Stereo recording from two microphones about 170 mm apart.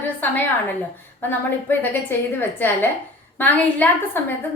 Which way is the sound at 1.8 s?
10° left (ahead or behind).